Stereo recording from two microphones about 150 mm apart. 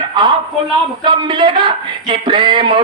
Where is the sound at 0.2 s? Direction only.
30° right (ahead or behind).